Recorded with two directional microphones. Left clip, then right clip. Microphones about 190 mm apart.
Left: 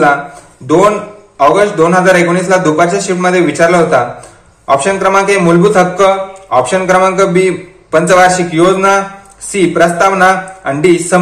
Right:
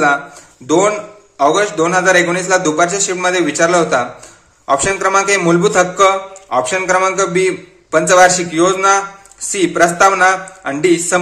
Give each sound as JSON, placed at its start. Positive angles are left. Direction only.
{"t": 1.5, "sound": "a man's voice", "side_deg": -30}